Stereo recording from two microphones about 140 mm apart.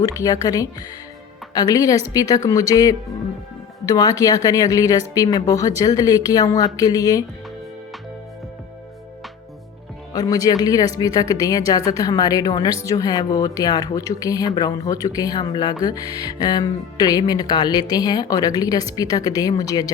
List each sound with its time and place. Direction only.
0.0 s speech: 25° left (ahead or behind)
10.1 s speech: 25° left (ahead or behind)